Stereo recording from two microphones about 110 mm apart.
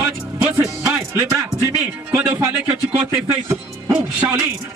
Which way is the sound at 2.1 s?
15° right (ahead or behind).